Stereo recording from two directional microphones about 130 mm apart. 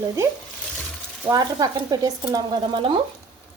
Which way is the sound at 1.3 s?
30° right (ahead or behind).